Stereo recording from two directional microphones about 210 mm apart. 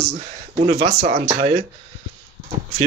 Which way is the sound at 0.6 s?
30° right (ahead or behind).